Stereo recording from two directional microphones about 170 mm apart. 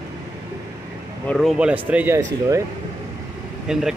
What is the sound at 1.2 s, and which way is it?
Speech, centre (ahead or behind).